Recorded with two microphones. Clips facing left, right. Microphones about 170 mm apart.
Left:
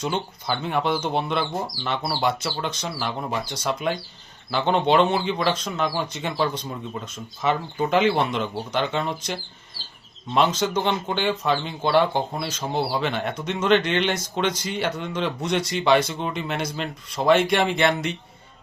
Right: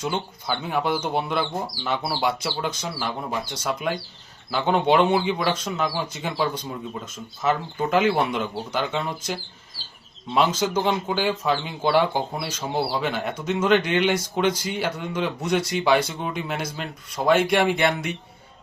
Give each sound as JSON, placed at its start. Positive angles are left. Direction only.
{"t": 0.0, "sound": "speech", "side_deg": -5}